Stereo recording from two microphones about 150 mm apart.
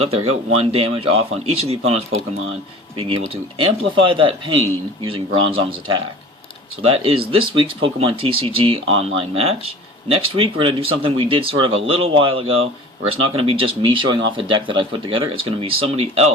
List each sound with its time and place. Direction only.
0.0 s speech: 45° right (ahead or behind)
3.6 s speech: 35° right (ahead or behind)